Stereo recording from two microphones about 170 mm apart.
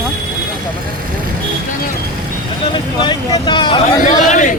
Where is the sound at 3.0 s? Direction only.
25° left (ahead or behind).